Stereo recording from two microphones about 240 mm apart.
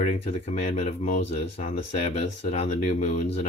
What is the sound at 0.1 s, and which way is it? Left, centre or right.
Speech, left.